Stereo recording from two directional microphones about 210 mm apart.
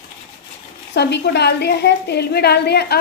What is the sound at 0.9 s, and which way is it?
A woman's voice, 55° left (ahead or behind).